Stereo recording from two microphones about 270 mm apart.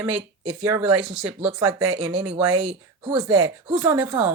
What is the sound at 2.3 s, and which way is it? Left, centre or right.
Speech, right.